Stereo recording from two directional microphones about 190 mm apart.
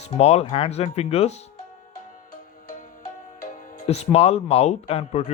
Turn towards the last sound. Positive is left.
turn(degrees=35)  # may be behind; listen again after turning